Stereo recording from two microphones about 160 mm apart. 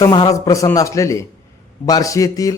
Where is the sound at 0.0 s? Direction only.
25° left (ahead or behind).